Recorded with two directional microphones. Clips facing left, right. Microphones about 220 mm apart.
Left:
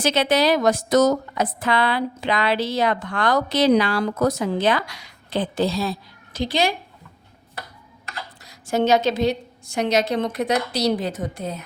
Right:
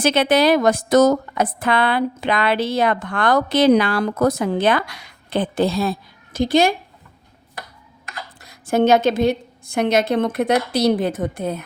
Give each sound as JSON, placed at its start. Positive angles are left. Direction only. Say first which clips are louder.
{"t": 0.0, "sound": "a woman's voice", "louder": "right 3 dB", "side_deg": -55}
{"t": 8.4, "sound": "a woman's voice", "louder": "right 4 dB", "side_deg": -55}